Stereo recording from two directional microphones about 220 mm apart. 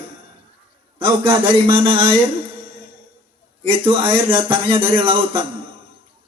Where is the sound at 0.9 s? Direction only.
25° right (ahead or behind).